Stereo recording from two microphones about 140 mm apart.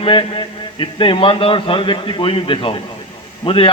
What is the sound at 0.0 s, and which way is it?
A man's voice, 35° left (ahead or behind).